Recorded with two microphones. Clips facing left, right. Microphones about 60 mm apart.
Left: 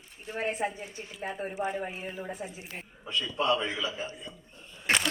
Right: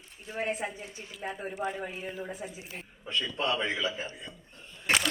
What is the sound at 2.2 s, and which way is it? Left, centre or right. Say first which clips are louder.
Speech: left 1 dB; centre.